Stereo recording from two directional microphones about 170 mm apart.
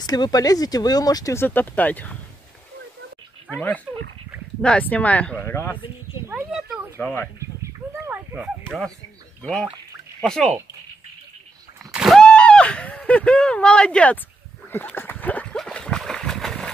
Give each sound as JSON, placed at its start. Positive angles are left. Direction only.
{"t": 0.0, "sound": "speech", "side_deg": 25}
{"t": 3.5, "sound": "speech", "side_deg": 10}
{"t": 6.2, "sound": "speech", "side_deg": -5}
{"t": 7.0, "sound": "speech", "side_deg": 10}
{"t": 7.3, "sound": "a sound", "side_deg": -15}
{"t": 9.4, "sound": "speech", "side_deg": 5}
{"t": 11.8, "sound": "speech", "side_deg": 0}
{"t": 14.7, "sound": "a sound", "side_deg": 10}